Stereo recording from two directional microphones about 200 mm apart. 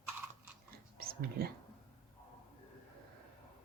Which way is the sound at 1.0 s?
50° right (ahead or behind).